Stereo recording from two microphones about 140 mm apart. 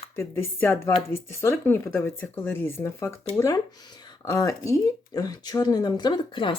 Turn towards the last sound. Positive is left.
turn(degrees=35)  # may be behind; listen again after turning